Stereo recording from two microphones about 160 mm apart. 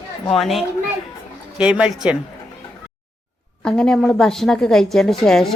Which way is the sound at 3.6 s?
5° left (ahead or behind).